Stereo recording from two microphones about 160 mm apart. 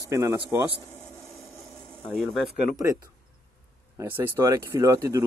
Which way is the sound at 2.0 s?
5° right (ahead or behind).